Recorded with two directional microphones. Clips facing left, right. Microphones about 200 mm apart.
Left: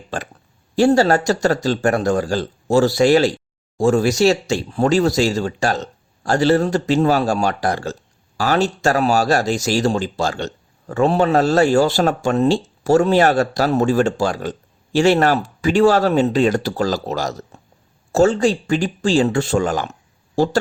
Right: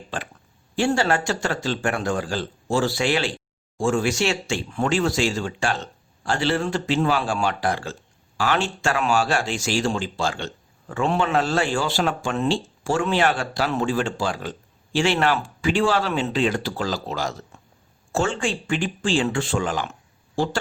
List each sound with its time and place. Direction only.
0.1 s speech: 45° left (ahead or behind)